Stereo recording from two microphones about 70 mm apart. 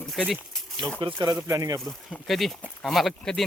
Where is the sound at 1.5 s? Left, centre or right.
Right.